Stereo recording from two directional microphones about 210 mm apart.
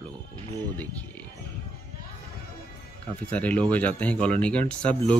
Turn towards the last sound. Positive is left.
turn(degrees=5)  # may be behind; listen again after turning